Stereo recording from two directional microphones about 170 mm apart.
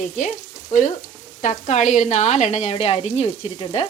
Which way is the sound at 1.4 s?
45° left (ahead or behind).